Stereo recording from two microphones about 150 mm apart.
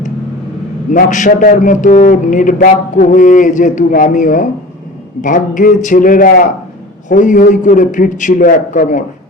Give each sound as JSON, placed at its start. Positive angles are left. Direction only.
{"t": 0.9, "sound": "a man's voice", "side_deg": 55}